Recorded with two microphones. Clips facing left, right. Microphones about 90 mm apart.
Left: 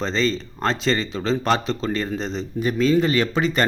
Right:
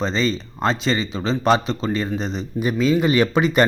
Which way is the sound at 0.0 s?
5° right (ahead or behind).